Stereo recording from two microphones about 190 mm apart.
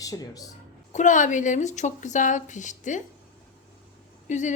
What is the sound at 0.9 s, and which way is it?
A woman's voice, 40° left (ahead or behind).